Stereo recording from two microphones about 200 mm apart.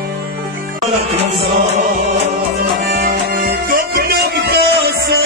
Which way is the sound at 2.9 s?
50° right (ahead or behind).